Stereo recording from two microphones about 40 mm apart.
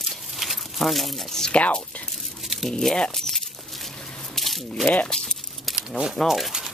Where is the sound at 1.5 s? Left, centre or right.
Left.